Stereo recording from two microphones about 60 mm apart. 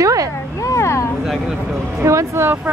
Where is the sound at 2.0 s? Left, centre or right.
Right.